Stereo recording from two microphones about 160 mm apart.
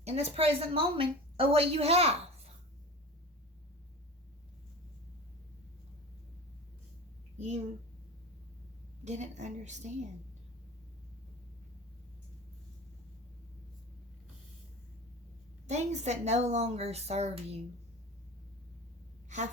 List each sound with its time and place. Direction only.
0.0 s a woman's voice: 40° right (ahead or behind)
7.3 s a child's voice: 45° right (ahead or behind)
9.0 s a woman's voice: 45° right (ahead or behind)
15.6 s a woman's voice: 45° right (ahead or behind)